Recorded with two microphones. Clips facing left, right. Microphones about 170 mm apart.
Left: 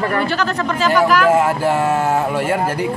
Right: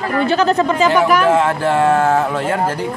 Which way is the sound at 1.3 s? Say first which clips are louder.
Even; 10° left (ahead or behind).